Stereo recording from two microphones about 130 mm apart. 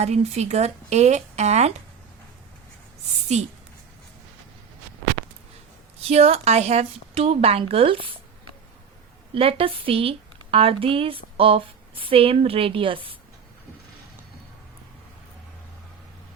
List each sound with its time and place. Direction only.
0.0 s speech: 60° right (ahead or behind)
6.0 s a woman's voice: 50° right (ahead or behind)
9.3 s a woman's voice: 45° right (ahead or behind)